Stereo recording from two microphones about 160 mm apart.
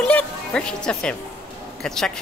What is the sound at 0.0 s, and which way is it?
Speech, 5° left (ahead or behind).